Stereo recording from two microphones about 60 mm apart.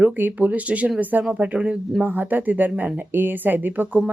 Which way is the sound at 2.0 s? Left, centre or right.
Right.